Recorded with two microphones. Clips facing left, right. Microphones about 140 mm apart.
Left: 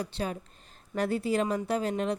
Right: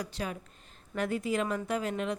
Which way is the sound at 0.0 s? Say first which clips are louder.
Left 3 dB; 30° left (ahead or behind).